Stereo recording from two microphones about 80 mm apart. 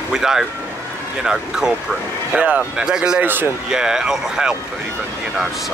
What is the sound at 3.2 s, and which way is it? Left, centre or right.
Speech, right.